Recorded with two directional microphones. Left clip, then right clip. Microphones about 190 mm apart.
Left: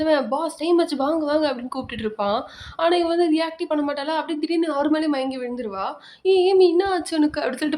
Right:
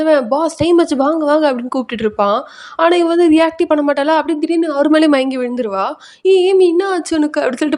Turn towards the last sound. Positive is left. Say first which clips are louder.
# right 7 dB
turn(degrees=-30)  # may be behind; listen again after turning